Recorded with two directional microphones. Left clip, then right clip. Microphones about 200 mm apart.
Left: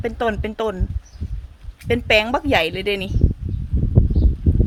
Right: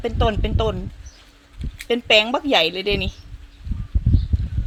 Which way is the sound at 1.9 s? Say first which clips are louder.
Even; 10° left (ahead or behind).